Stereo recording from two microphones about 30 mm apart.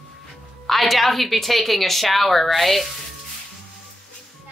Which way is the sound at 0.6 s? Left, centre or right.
Centre.